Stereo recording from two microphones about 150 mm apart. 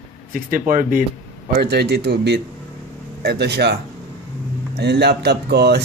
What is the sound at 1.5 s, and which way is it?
Speech, 90° right.